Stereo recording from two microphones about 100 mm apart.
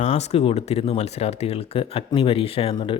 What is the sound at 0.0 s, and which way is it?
Speech, 90° left.